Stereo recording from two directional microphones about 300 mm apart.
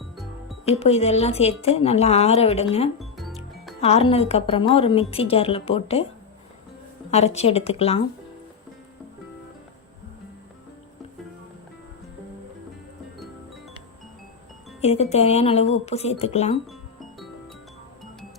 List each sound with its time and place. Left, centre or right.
0.7 s a woman's voice: centre
3.0 s music: centre
3.8 s a woman's voice: left
7.1 s a woman's voice: left
14.8 s a woman's voice: left
16.6 s music: centre